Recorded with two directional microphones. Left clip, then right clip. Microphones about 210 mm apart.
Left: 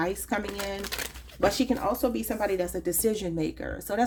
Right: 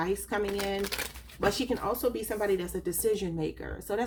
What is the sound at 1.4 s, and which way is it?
Speech, 35° left (ahead or behind).